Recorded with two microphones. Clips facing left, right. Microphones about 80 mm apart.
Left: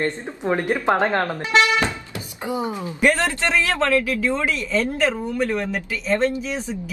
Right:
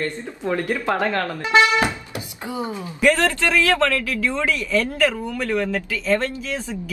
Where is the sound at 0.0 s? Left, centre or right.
Left.